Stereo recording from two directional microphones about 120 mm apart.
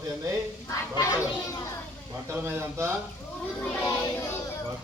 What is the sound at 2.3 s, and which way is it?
Speech, 15° right (ahead or behind).